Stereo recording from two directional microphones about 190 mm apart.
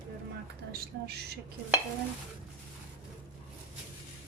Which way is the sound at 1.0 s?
60° right (ahead or behind).